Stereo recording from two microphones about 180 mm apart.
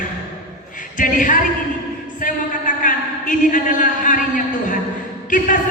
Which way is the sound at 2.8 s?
45° left (ahead or behind).